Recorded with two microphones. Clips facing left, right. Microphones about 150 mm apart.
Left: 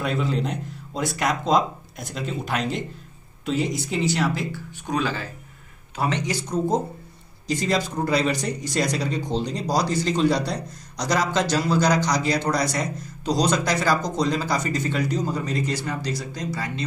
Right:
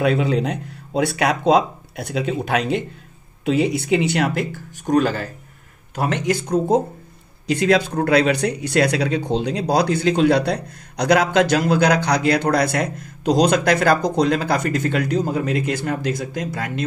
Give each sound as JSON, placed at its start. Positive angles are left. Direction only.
{"t": 0.0, "sound": "speech", "side_deg": -65}